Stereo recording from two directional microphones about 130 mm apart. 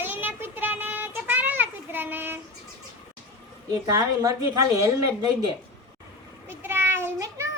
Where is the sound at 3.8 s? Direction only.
25° right (ahead or behind).